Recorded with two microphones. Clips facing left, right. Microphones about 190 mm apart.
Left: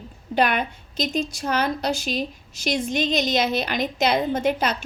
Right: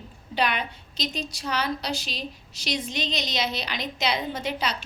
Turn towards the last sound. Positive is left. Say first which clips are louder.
# left 7 dB
turn(degrees=50)  # may be behind; listen again after turning